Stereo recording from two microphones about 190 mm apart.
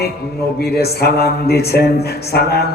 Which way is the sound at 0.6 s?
55° left (ahead or behind).